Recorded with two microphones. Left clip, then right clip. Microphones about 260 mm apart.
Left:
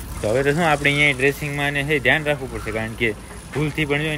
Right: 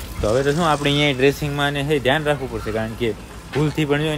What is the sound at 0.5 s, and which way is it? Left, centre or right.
Speech, centre.